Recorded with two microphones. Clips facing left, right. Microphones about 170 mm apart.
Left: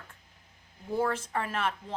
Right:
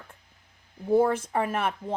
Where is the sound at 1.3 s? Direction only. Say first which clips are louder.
Right 5 dB; 15° right (ahead or behind).